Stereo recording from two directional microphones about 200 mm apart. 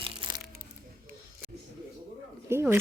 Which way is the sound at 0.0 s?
20° right (ahead or behind).